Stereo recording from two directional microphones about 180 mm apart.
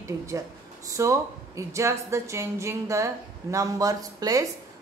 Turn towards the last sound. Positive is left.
turn(degrees=-20)  # may be behind; listen again after turning